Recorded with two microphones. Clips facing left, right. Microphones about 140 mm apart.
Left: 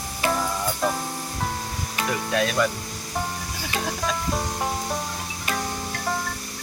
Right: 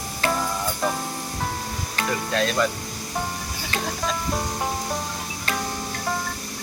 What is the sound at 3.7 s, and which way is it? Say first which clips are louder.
Speech: even; 5° left (ahead or behind).